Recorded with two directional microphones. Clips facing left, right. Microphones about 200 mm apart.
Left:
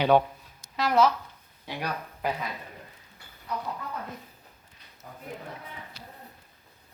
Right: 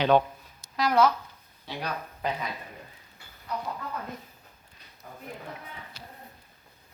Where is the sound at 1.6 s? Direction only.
10° left (ahead or behind).